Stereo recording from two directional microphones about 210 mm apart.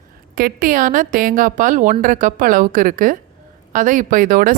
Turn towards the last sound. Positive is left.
turn(degrees=-40)  # may be behind; listen again after turning